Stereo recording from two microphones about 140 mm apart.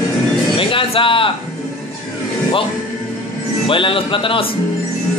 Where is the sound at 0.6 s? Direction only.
40° left (ahead or behind).